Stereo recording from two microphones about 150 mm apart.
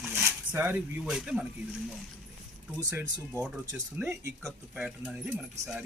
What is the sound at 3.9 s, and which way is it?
Speech, 15° right (ahead or behind).